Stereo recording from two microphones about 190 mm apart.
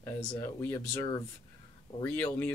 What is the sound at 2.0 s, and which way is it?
Speech, 10° left (ahead or behind).